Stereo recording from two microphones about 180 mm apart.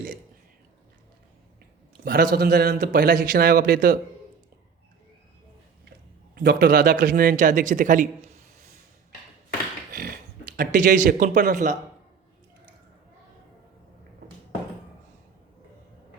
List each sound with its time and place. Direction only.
2.0 s a man's voice: 55° right (ahead or behind)
6.3 s a man's voice: 60° right (ahead or behind)
9.9 s a sound: 55° right (ahead or behind)
10.6 s a man's voice: 50° right (ahead or behind)